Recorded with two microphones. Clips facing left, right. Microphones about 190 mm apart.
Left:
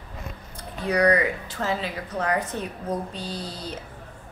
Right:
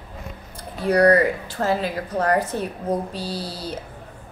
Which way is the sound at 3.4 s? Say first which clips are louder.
Right 4 dB; 5° right (ahead or behind).